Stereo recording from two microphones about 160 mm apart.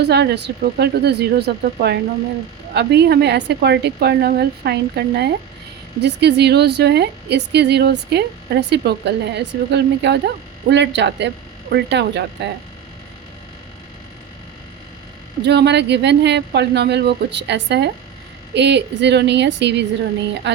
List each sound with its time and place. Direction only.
0.0 s a woman's voice: 90° right
15.4 s a woman's voice: 90° right